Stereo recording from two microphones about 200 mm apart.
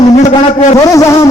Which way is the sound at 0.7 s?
15° left (ahead or behind).